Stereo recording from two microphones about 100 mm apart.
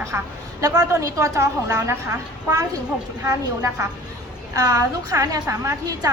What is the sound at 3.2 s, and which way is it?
A woman's voice, 35° right (ahead or behind).